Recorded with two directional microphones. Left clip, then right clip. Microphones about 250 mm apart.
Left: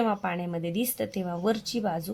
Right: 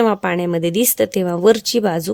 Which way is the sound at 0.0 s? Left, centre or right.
Right.